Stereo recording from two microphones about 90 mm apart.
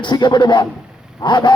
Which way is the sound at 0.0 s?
55° left (ahead or behind).